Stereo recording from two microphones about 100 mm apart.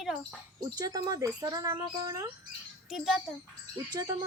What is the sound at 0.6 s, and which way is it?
Speech, 40° right (ahead or behind).